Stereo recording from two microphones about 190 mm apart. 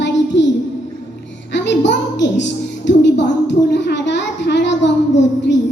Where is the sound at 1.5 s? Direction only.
70° left (ahead or behind).